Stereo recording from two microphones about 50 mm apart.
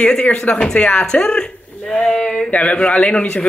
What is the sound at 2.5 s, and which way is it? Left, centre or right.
Speech, left.